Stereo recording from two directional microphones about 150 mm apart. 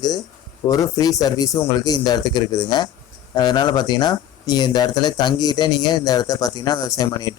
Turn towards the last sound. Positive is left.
turn(degrees=25)  # may be behind; listen again after turning